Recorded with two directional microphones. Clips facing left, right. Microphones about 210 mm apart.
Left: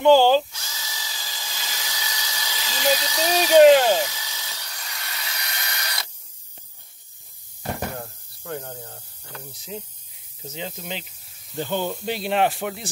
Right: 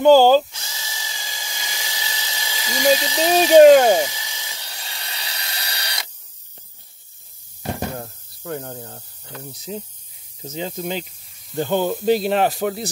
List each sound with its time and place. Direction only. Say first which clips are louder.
0.0 s speech: right 4 dB; 45° right (ahead or behind)
0.5 s drill: right 2 dB; 25° right (ahead or behind)
3.7 s speech: right 5 dB; 50° right (ahead or behind)
4.1 s wood: right 1 dB; 15° right (ahead or behind)
7.9 s a sound: right 3 dB; 40° right (ahead or behind)
9.7 s speech: right 4 dB; 40° right (ahead or behind)